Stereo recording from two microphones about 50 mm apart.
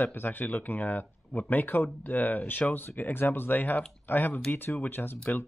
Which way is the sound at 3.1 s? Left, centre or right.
Left.